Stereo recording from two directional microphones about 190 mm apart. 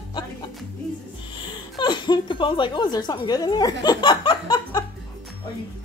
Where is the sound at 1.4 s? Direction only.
25° left (ahead or behind).